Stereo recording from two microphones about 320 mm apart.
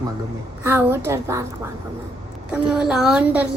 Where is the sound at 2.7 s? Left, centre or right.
Centre.